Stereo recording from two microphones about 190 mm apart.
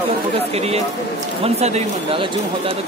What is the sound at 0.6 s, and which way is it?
Speech, 35° right (ahead or behind).